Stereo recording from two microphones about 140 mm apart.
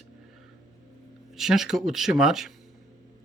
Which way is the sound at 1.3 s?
Centre (ahead or behind).